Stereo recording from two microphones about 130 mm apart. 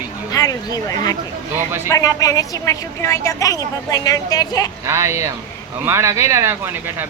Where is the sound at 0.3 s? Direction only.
30° left (ahead or behind).